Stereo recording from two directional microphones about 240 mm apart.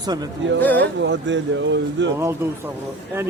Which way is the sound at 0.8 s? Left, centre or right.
Right.